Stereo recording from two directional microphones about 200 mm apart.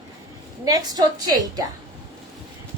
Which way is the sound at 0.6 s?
20° right (ahead or behind).